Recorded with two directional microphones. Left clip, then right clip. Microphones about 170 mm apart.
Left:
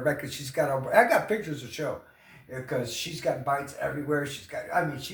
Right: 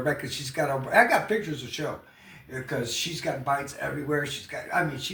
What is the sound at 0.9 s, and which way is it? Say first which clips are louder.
Speech: right 1 dB; 20° left (ahead or behind).